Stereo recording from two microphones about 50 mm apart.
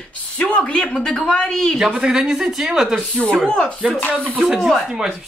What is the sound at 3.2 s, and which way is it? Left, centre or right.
Speech, centre.